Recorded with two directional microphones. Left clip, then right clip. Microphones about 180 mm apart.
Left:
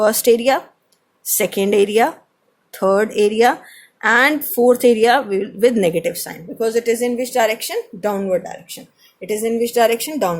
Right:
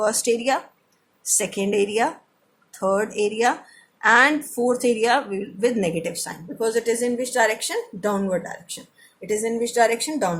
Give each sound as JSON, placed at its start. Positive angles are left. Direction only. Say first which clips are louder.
{"t": 0.0, "sound": "a woman's voice", "louder": "left 7 dB", "side_deg": 30}